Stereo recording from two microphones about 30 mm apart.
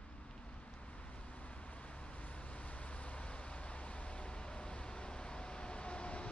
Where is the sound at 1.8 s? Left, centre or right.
Left.